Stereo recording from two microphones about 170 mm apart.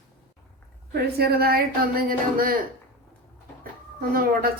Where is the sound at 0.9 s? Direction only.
65° right (ahead or behind).